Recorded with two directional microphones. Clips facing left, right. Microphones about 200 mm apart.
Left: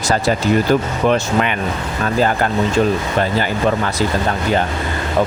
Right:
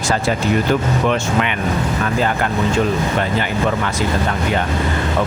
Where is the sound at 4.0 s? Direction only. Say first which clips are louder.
Left 2 dB; 35° left (ahead or behind).